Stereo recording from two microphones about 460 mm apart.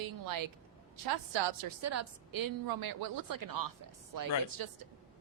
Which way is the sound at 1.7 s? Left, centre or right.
Right.